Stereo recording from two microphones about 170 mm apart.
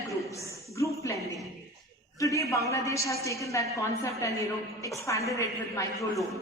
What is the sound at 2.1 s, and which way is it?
A woman's voice, 20° left (ahead or behind).